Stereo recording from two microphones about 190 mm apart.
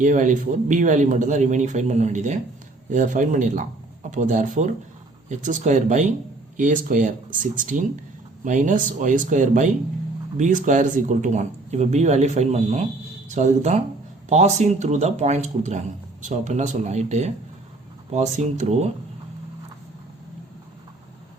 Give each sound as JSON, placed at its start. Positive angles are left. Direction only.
{"t": 0.0, "sound": "speech", "side_deg": -40}